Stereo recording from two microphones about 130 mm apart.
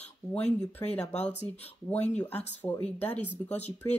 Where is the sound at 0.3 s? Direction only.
10° left (ahead or behind).